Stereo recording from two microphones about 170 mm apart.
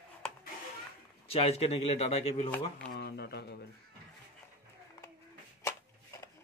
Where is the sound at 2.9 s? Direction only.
75° left (ahead or behind).